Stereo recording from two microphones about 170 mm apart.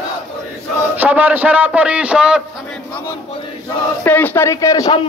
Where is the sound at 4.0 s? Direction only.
10° left (ahead or behind).